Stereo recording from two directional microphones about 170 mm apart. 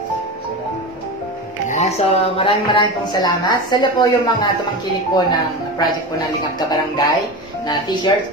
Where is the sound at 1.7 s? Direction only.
40° left (ahead or behind); by 5.9 s 25° left (ahead or behind).